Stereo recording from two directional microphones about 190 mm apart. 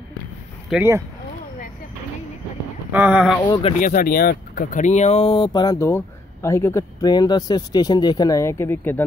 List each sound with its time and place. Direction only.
0.7 s speech: 10° right (ahead or behind)
2.9 s speech: 10° right (ahead or behind)
3.8 s speech: 50° left (ahead or behind); by 9.0 s 10° left (ahead or behind)